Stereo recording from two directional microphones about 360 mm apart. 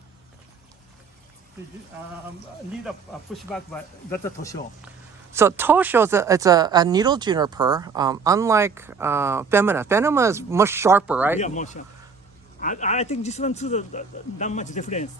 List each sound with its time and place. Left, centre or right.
3.3 s speech: centre
5.3 s speech: centre
11.3 s a man's voice: centre